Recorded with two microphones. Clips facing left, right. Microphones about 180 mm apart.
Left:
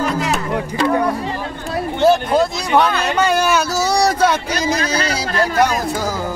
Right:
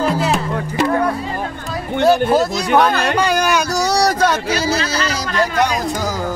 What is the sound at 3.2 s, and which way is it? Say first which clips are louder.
Speech: left 4 dB; 5° left (ahead or behind).